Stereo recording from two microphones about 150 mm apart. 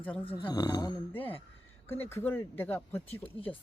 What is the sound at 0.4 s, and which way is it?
Speech, 25° left (ahead or behind).